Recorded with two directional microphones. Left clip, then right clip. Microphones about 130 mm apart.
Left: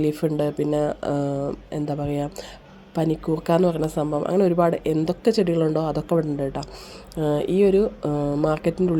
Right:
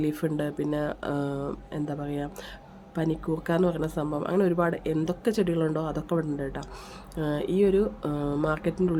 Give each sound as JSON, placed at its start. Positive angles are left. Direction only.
{"t": 0.0, "sound": "a woman's voice", "side_deg": 25}
{"t": 1.7, "sound": "a woman's voice", "side_deg": 30}